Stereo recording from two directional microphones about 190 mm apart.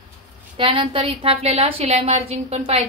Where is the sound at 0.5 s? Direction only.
25° right (ahead or behind).